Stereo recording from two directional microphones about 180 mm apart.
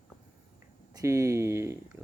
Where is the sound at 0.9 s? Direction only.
15° right (ahead or behind).